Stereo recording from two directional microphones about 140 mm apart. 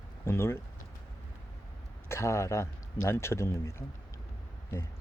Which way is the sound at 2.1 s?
20° left (ahead or behind).